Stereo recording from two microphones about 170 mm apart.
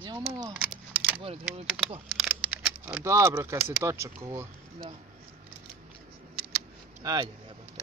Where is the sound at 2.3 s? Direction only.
10° right (ahead or behind).